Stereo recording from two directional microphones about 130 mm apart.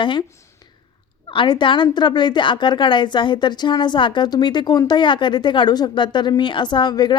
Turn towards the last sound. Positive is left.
turn(degrees=35)  # may be behind; listen again after turning